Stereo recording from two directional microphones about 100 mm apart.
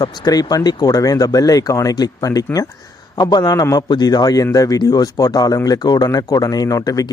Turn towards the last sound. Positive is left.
turn(degrees=35)  # may be behind; listen again after turning